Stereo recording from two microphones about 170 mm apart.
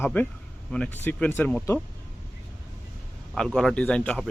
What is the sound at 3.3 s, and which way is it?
Speech, centre (ahead or behind).